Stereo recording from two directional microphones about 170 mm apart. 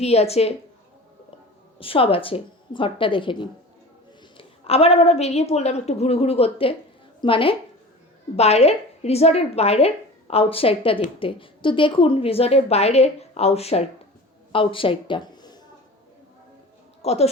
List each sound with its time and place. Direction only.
0.0 s a woman's voice: 40° left (ahead or behind)
1.8 s a woman's voice: 30° left (ahead or behind)
17.0 s speech: 35° left (ahead or behind)